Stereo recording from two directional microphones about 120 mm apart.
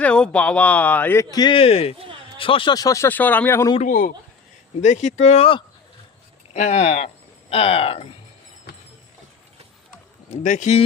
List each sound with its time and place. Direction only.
0.0 s speech: 10° left (ahead or behind)
1.2 s speech: 35° left (ahead or behind)
1.5 s speech: 55° left (ahead or behind)
2.7 s speech: 30° left (ahead or behind)
3.1 s speech: 15° left (ahead or behind)
4.8 s speech: 80° left; by 5.6 s 50° left (ahead or behind)
6.5 s speech: 75° left (ahead or behind)
7.5 s speech: 50° left (ahead or behind)
10.4 s speech: 85° left